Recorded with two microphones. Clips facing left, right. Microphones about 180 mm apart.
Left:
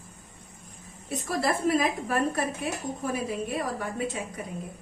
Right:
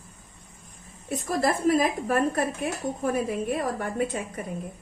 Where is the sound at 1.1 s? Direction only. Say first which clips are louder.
Right 2 dB; 45° right (ahead or behind).